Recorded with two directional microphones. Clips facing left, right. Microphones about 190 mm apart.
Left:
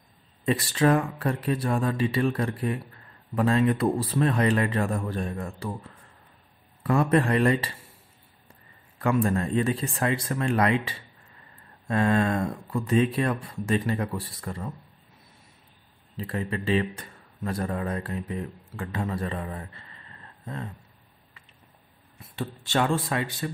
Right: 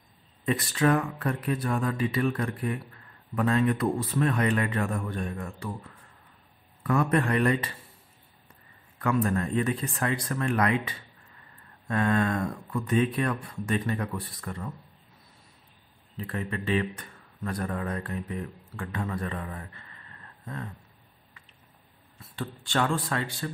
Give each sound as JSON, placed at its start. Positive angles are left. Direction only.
{"t": 0.5, "sound": "a man's voice", "side_deg": 30}
{"t": 6.8, "sound": "a man's voice", "side_deg": 30}
{"t": 8.9, "sound": "a man's voice", "side_deg": 30}
{"t": 16.2, "sound": "a man's voice", "side_deg": 25}
{"t": 22.3, "sound": "a man's voice", "side_deg": 25}